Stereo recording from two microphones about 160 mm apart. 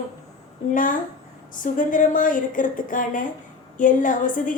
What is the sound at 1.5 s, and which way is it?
A woman's voice, 55° left (ahead or behind).